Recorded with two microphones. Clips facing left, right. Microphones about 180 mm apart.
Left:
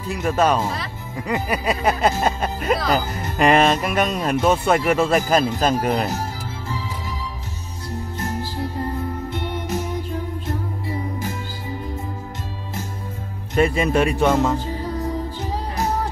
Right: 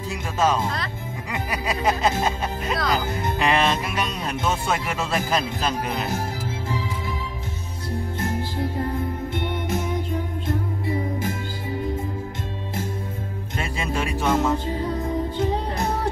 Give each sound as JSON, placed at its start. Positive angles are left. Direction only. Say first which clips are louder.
{"t": 0.1, "sound": "speech", "louder": "left 4 dB", "side_deg": 60}
{"t": 13.6, "sound": "speech", "louder": "left 10 dB", "side_deg": 60}